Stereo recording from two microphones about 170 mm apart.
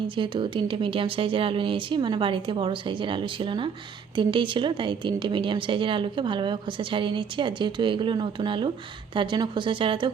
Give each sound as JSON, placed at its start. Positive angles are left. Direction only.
{"t": 0.2, "sound": "a woman's voice", "side_deg": -30}